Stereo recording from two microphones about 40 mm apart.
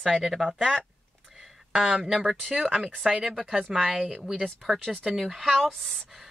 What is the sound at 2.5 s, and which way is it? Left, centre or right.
Speech, centre.